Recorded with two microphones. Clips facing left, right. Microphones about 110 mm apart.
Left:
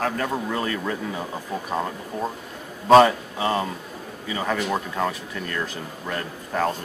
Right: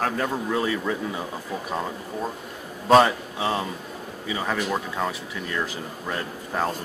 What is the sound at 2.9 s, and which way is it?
A man's voice, centre (ahead or behind).